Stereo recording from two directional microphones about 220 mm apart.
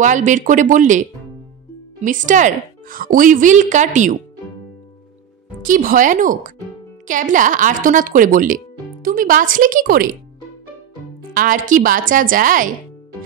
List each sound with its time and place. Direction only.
0.0 s speech: 35° right (ahead or behind)
2.0 s speech: 35° right (ahead or behind)
5.6 s speech: 40° right (ahead or behind)
11.3 s speech: 40° right (ahead or behind)